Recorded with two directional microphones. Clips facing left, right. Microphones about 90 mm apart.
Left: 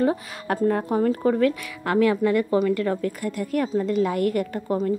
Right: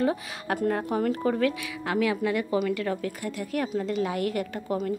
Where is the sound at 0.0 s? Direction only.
40° left (ahead or behind).